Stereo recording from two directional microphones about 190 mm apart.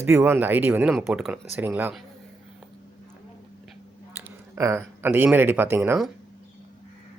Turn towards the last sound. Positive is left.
turn(degrees=-10)  # may be behind; listen again after turning